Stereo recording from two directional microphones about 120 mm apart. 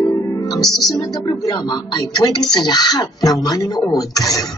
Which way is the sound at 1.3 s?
35° left (ahead or behind).